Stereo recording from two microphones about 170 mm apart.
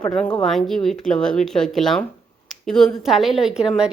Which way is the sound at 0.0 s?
5° left (ahead or behind).